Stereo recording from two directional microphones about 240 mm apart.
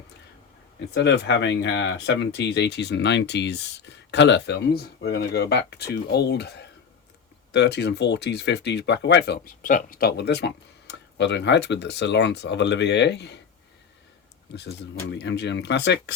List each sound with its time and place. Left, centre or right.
0.9 s speech: left
14.5 s speech: left